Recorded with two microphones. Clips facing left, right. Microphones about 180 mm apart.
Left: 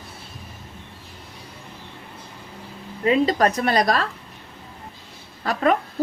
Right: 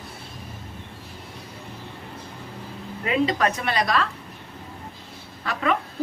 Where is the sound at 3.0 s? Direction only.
40° left (ahead or behind).